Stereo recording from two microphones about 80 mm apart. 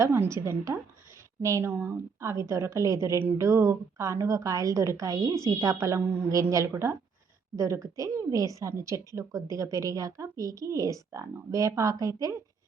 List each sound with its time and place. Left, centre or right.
0.0 s a woman's voice: right
1.6 s speech: right
2.2 s a woman's voice: right
3.2 s speech: right
3.4 s a woman's voice: right